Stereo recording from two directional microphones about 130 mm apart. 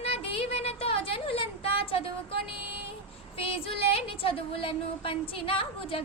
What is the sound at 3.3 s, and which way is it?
Speech, 45° left (ahead or behind).